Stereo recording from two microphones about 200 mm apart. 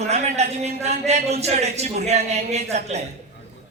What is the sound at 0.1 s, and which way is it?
A man's voice, 35° right (ahead or behind).